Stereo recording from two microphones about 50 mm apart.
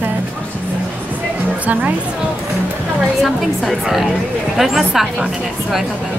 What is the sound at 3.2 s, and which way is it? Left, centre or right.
A woman's voice, centre.